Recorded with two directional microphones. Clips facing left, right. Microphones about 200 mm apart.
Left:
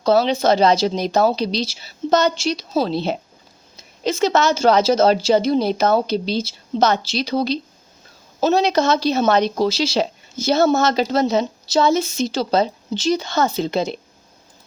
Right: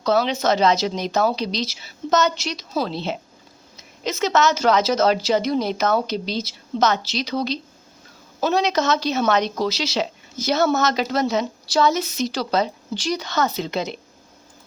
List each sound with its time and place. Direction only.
0.0 s a woman's voice: 30° left (ahead or behind)